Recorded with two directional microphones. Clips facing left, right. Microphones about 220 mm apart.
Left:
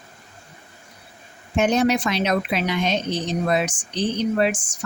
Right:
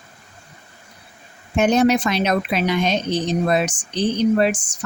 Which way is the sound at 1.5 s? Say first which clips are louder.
Right 3 dB; 45° right (ahead or behind).